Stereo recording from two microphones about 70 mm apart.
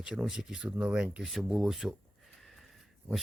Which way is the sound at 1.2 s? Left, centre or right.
Centre.